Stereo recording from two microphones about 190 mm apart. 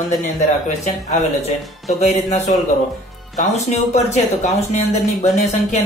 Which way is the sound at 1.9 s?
35° left (ahead or behind).